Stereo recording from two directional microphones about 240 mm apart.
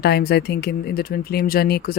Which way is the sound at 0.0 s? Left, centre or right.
Left.